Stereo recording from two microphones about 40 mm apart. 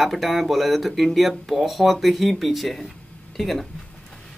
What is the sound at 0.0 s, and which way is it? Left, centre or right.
Speech, centre.